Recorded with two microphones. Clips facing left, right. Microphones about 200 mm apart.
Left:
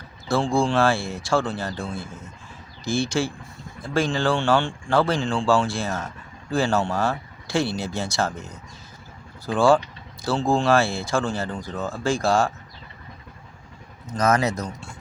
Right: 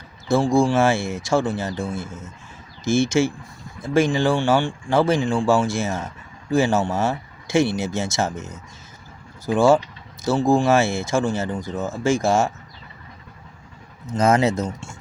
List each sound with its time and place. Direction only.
0.3 s speech: 20° right (ahead or behind)
14.1 s speech: 25° right (ahead or behind)